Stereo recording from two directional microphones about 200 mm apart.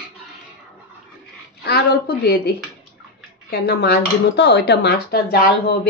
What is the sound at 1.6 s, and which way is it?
Speech, 50° left (ahead or behind).